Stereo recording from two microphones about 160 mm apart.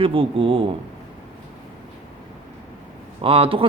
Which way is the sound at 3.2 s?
35° right (ahead or behind).